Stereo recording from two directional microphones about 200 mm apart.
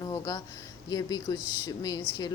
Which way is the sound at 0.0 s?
20° left (ahead or behind).